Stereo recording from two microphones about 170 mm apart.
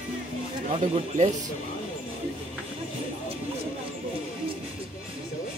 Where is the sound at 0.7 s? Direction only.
40° right (ahead or behind).